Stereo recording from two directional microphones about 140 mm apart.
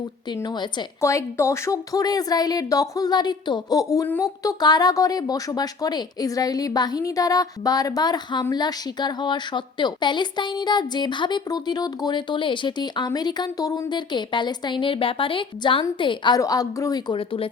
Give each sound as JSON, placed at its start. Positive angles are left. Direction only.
{"t": 0.4, "sound": "a woman's voice", "side_deg": 30}
{"t": 1.0, "sound": "a woman's voice", "side_deg": 20}
{"t": 16.4, "sound": "speech", "side_deg": 25}
{"t": 17.1, "sound": "a woman's voice", "side_deg": 40}